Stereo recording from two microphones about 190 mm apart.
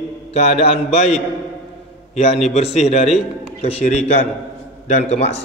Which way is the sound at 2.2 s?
35° left (ahead or behind).